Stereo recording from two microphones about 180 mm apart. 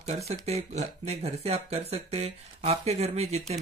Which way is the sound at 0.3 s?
35° right (ahead or behind).